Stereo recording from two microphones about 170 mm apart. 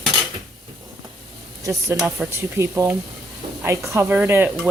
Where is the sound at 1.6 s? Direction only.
20° right (ahead or behind).